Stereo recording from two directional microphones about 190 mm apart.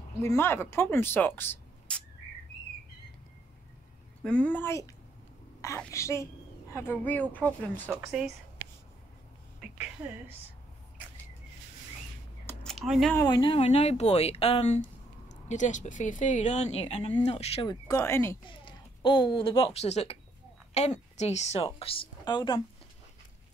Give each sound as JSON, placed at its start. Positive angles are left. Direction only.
{"t": 0.2, "sound": "speech", "side_deg": 15}
{"t": 4.2, "sound": "a woman's voice", "side_deg": 5}
{"t": 8.1, "sound": "a woman's voice", "side_deg": 0}
{"t": 12.6, "sound": "a sound", "side_deg": 0}
{"t": 13.1, "sound": "speech", "side_deg": 20}
{"t": 17.6, "sound": "a woman's voice", "side_deg": 20}
{"t": 18.4, "sound": "a sound", "side_deg": 25}
{"t": 19.3, "sound": "a woman's voice", "side_deg": 25}